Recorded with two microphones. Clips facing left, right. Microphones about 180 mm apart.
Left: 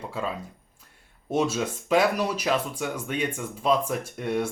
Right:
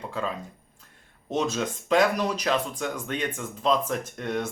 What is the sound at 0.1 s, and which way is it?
Speech, 5° left (ahead or behind).